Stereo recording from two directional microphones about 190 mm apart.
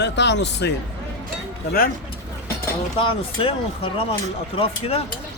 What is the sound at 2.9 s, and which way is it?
Speech, 30° left (ahead or behind).